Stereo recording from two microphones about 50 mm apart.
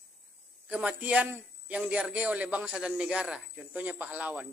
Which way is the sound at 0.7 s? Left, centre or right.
Right.